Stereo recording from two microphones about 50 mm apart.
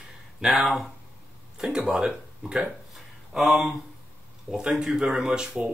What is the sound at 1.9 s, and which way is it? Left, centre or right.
Speech, centre.